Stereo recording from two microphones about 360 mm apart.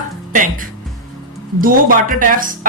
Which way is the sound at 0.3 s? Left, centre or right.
Right.